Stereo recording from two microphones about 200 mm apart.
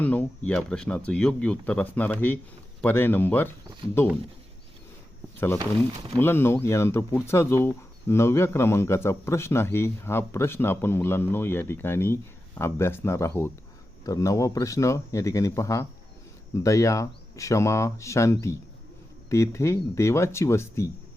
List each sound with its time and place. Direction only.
0.0 s speech: 10° left (ahead or behind)
6.1 s speech: 10° left (ahead or behind)